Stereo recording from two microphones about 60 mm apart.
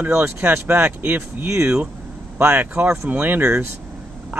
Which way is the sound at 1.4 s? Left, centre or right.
Right.